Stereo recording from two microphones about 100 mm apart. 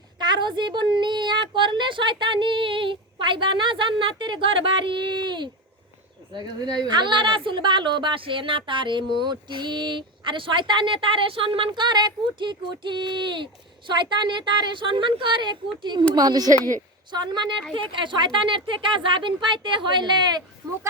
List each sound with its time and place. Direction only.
0.2 s a woman's voice: 50° right (ahead or behind)